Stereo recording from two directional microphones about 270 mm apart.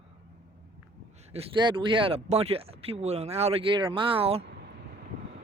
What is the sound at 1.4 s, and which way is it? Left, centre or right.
A man's voice, centre.